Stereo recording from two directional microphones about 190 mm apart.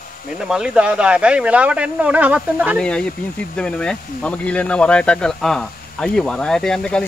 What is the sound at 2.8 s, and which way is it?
Speech, 5° left (ahead or behind).